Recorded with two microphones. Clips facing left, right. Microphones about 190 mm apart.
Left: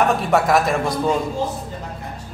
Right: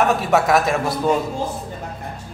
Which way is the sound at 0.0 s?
Centre (ahead or behind).